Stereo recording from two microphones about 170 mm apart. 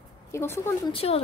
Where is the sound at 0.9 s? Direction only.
35° left (ahead or behind).